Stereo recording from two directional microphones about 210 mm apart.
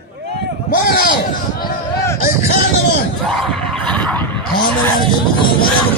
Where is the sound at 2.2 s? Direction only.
45° left (ahead or behind).